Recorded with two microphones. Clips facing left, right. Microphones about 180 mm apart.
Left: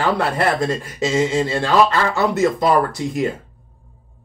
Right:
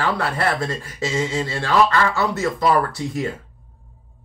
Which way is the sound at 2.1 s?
20° left (ahead or behind).